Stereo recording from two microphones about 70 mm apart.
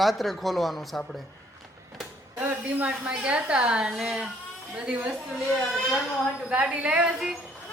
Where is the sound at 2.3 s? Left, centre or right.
Right.